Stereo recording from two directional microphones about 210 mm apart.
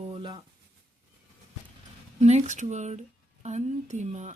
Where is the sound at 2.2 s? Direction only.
35° right (ahead or behind).